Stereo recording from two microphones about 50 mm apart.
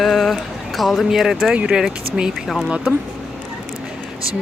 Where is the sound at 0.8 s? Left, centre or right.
Centre.